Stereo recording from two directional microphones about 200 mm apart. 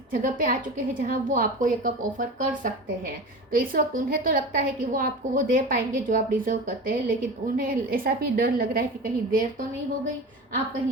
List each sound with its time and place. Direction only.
0.1 s a woman's voice: 45° right (ahead or behind)